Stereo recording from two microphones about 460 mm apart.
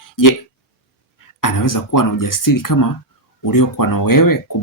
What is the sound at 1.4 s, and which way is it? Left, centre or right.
Speech, left.